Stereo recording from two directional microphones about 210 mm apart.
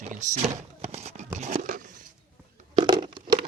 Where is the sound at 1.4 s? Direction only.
35° right (ahead or behind).